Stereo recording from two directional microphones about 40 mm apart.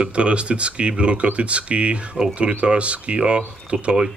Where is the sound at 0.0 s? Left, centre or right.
Right.